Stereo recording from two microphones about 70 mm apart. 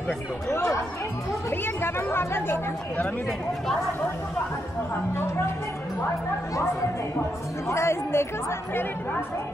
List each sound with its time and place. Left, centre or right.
1.8 s speech: left
7.7 s speech: left